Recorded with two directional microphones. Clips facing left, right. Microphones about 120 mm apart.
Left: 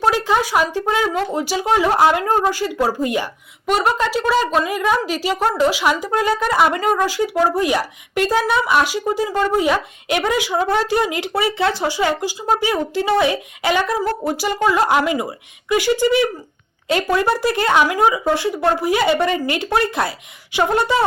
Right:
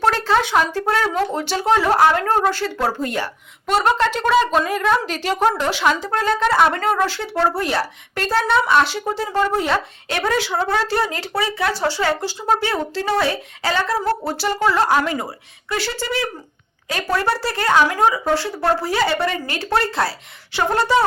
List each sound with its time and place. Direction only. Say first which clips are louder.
0.0 s speech: even; 10° left (ahead or behind)